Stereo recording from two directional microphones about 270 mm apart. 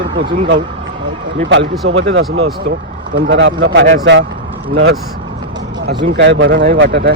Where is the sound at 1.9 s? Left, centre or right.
Right.